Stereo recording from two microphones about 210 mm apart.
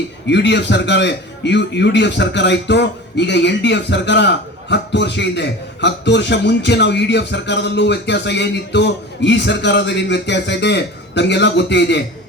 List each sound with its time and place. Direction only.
0.3 s a man's voice: 55° left (ahead or behind)